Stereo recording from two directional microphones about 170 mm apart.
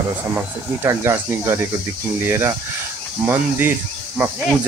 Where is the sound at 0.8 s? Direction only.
15° right (ahead or behind).